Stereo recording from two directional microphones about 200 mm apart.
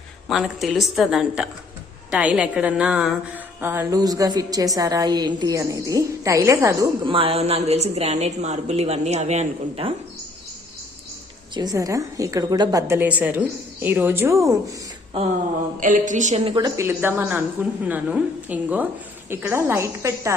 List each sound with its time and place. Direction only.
0.3 s a woman's voice: centre (ahead or behind)
7.1 s a woman's voice: 25° right (ahead or behind)
11.5 s a woman's voice: 20° right (ahead or behind)
15.8 s a woman's voice: 40° right (ahead or behind); by 20.3 s 15° right (ahead or behind)